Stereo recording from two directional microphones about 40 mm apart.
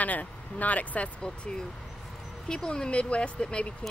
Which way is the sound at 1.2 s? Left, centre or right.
Centre.